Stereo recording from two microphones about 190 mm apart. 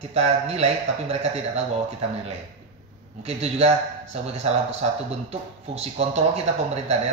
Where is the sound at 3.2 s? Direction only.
35° right (ahead or behind).